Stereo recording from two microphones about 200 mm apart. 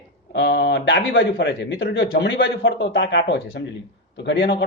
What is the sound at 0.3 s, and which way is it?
A man's voice, 60° left (ahead or behind).